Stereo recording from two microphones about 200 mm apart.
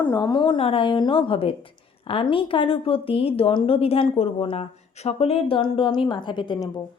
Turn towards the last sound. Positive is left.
turn(degrees=20)  # may be behind; listen again after turning